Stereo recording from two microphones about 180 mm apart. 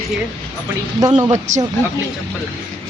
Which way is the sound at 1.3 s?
40° right (ahead or behind).